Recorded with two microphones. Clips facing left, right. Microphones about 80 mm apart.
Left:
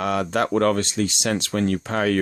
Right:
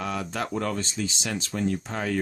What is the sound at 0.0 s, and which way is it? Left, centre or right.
Speech, left.